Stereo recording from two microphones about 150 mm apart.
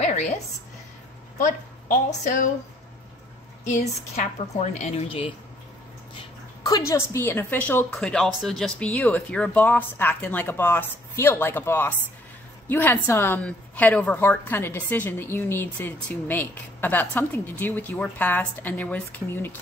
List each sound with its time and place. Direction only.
0.0 s a sound: 50° left (ahead or behind)
1.4 s speech: 55° left (ahead or behind)
3.6 s a woman's voice: 55° left (ahead or behind)
6.6 s a woman's voice: 20° left (ahead or behind)